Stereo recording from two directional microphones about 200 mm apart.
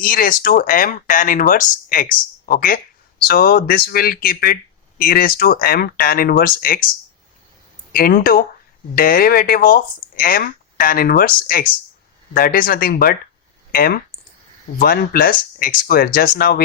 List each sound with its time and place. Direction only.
0.0 s speech: 45° left (ahead or behind)
7.9 s speech: 45° left (ahead or behind)